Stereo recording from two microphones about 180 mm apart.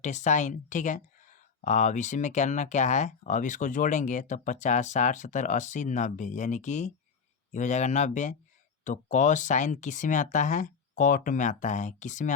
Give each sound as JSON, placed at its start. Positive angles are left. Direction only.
{"t": 0.0, "sound": "speech", "side_deg": 40}